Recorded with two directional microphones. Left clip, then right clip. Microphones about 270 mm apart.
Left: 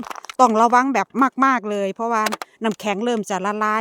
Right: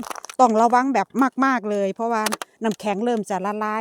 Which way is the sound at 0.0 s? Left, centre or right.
Centre.